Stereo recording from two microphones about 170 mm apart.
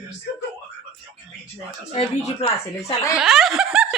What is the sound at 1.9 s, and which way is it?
Speech, 35° left (ahead or behind).